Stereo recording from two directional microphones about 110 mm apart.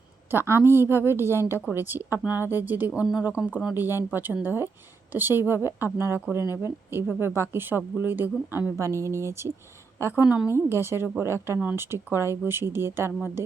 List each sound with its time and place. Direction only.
0.3 s speech: 20° right (ahead or behind)